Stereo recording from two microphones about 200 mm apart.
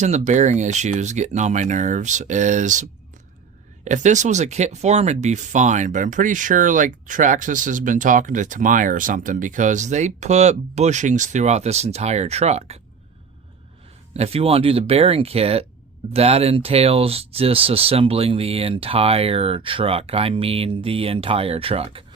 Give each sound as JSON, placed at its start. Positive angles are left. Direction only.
{"t": 0.0, "sound": "speech", "side_deg": -35}
{"t": 3.8, "sound": "speech", "side_deg": -35}
{"t": 14.1, "sound": "speech", "side_deg": -30}